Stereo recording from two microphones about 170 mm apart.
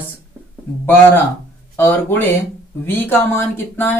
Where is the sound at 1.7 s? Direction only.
15° left (ahead or behind).